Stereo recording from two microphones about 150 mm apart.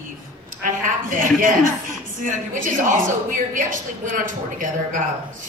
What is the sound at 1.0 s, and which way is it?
A woman's voice, 65° right (ahead or behind).